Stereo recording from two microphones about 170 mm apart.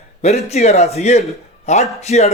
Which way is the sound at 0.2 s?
40° left (ahead or behind).